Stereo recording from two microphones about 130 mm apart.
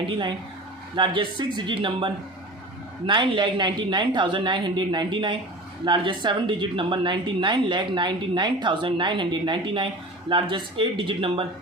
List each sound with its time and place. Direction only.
0.1 s speech: 40° right (ahead or behind)